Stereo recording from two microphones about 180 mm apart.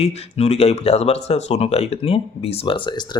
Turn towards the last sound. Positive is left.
turn(degrees=25)  # may be behind; listen again after turning